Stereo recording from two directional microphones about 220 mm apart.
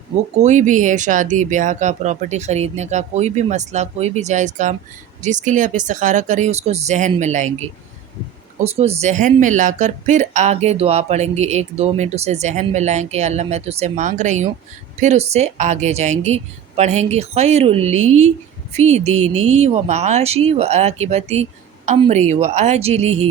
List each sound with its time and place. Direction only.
0.3 s speech: 30° right (ahead or behind)